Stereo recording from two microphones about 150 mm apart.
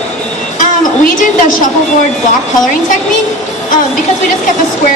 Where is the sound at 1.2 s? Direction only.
60° left (ahead or behind).